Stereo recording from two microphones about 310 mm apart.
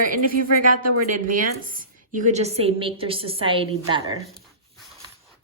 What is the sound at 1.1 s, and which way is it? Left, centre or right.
A woman's voice, right.